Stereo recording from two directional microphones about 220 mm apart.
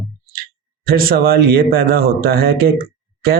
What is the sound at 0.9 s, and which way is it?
Speech, 45° right (ahead or behind).